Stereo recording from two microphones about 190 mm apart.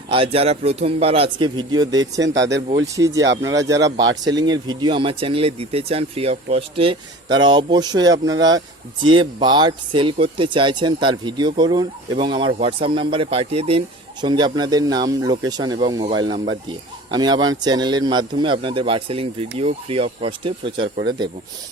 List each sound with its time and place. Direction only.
0.1 s speech: 30° right (ahead or behind)
2.2 s speech: 70° right (ahead or behind)
2.8 s speech: 15° right (ahead or behind)